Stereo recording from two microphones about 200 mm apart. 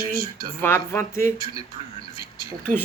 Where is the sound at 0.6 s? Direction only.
10° left (ahead or behind).